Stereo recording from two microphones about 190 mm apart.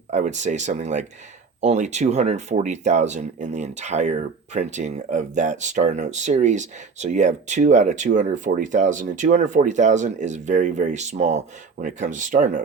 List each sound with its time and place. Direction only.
0.1 s speech: 40° right (ahead or behind)